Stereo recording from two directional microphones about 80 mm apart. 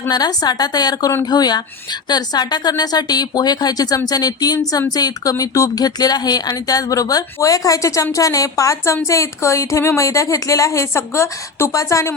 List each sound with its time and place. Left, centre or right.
0.1 s a woman's voice: left